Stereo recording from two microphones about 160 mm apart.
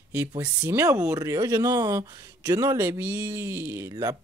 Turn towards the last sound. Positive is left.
turn(degrees=-20)  # may be behind; listen again after turning